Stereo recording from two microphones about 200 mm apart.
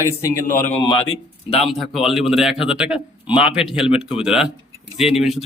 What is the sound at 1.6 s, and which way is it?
A man's voice, centre (ahead or behind).